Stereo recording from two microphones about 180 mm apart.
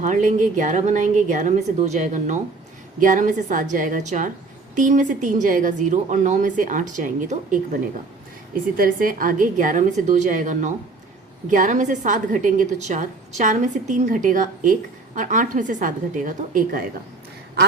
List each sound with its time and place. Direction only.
0.0 s a woman's voice: 45° right (ahead or behind)